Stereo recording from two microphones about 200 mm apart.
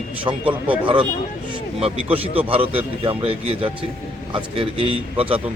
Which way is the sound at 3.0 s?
30° right (ahead or behind).